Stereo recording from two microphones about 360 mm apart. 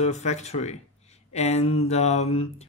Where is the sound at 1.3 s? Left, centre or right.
Centre.